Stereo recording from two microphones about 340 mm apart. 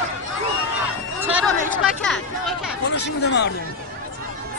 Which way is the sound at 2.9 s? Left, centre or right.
Left.